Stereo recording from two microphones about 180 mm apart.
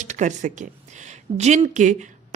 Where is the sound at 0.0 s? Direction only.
40° right (ahead or behind).